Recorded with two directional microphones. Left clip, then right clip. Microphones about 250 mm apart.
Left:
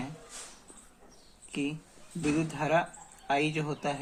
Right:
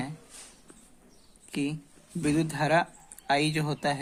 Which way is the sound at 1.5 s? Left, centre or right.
Right.